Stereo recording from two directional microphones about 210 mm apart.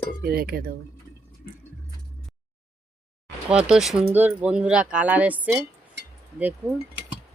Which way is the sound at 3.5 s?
5° right (ahead or behind).